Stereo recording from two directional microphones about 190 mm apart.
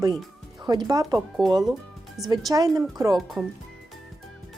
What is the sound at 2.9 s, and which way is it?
Speech, 20° right (ahead or behind).